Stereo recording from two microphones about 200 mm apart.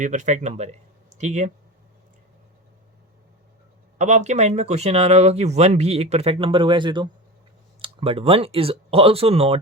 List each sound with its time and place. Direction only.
0.0 s speech: 40° right (ahead or behind)
3.9 s speech: 35° right (ahead or behind)